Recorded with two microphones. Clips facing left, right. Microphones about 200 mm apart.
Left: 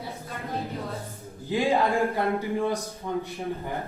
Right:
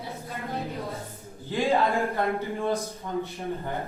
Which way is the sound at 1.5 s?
15° left (ahead or behind).